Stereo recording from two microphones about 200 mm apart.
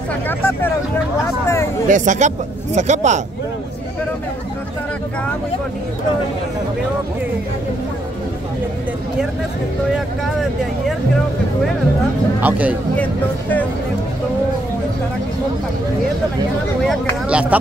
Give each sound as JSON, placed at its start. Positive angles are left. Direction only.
{"t": 0.3, "sound": "speech", "side_deg": 10}
{"t": 1.9, "sound": "speech", "side_deg": -40}
{"t": 12.4, "sound": "speech", "side_deg": -10}
{"t": 12.9, "sound": "speech", "side_deg": 5}
{"t": 16.8, "sound": "speech", "side_deg": 0}